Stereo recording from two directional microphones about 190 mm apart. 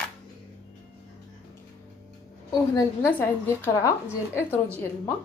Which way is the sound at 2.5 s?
15° left (ahead or behind).